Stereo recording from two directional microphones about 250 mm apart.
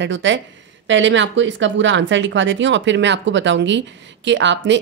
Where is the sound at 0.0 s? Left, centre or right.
Right.